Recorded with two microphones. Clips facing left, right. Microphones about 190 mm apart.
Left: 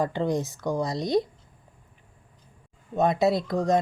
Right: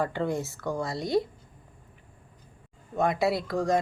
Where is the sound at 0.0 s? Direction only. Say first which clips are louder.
Left 3 dB; 15° left (ahead or behind).